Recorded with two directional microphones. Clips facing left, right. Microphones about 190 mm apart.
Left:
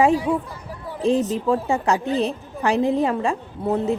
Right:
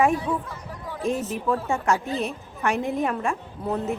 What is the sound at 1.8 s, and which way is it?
Speech, 35° left (ahead or behind).